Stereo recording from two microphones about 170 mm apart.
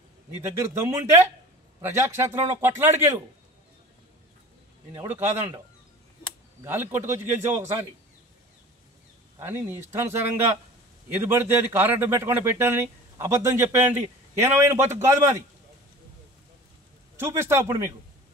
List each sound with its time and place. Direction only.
0.7 s speech: 15° right (ahead or behind)
6.6 s speech: 15° right (ahead or behind)
9.4 s speech: 15° right (ahead or behind)
17.2 s speech: 15° right (ahead or behind)